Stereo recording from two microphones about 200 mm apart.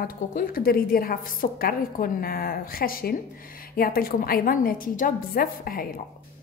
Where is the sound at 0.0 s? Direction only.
45° left (ahead or behind).